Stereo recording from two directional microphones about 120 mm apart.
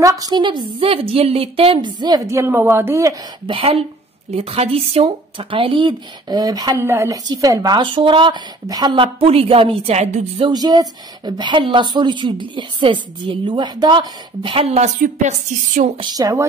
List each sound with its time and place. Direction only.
0.0 s a woman's voice: 30° right (ahead or behind)
2.2 s speech: 20° right (ahead or behind)
3.4 s speech: 50° right (ahead or behind); by 6.9 s 30° right (ahead or behind)
6.9 s a woman's voice: 20° right (ahead or behind); by 9.9 s 50° right (ahead or behind)
10.5 s a woman's voice: 35° right (ahead or behind); by 15.9 s 90° right
16.0 s a woman's voice: 30° right (ahead or behind)